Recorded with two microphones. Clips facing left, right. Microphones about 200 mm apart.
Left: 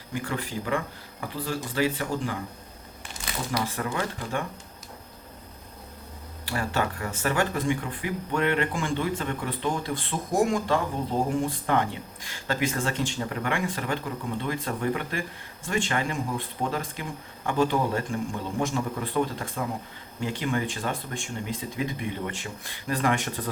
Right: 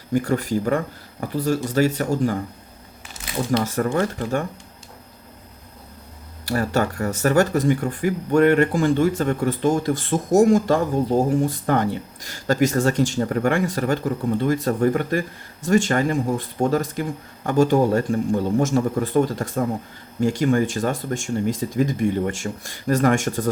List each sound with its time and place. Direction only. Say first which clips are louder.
0.1 s speech: right 11 dB; 40° right (ahead or behind)
3.6 s speech: right 8 dB; 45° right (ahead or behind)
6.4 s speech: right 7 dB; 40° right (ahead or behind)